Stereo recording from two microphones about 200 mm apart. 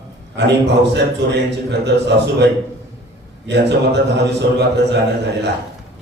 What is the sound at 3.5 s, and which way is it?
A man's voice, 60° right (ahead or behind).